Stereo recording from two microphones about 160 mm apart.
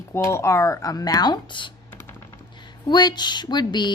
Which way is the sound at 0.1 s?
15° left (ahead or behind).